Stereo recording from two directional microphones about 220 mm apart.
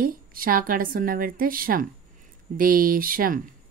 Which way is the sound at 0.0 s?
40° right (ahead or behind).